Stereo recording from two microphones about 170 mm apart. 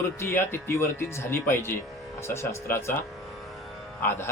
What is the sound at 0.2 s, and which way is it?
Speech, 15° left (ahead or behind).